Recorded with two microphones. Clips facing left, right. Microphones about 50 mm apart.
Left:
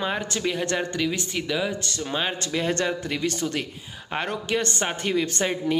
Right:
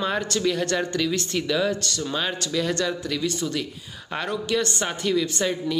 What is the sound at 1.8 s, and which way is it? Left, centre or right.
Speech, left.